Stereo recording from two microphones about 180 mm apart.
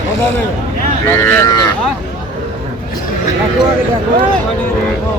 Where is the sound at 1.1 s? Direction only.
15° left (ahead or behind).